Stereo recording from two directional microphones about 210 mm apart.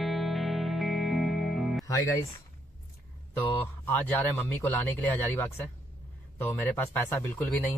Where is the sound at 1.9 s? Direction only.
15° left (ahead or behind).